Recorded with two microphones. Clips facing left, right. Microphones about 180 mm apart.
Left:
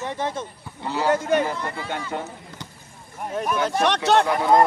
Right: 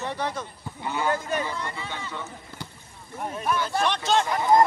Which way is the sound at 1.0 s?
75° left (ahead or behind).